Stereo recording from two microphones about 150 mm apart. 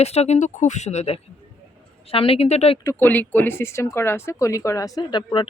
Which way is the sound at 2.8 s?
15° left (ahead or behind).